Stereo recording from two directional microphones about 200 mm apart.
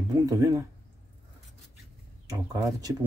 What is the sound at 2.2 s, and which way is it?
Speech, 15° right (ahead or behind).